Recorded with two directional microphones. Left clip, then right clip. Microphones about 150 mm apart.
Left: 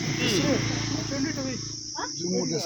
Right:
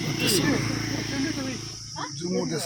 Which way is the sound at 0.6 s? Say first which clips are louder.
Even; 60° right (ahead or behind).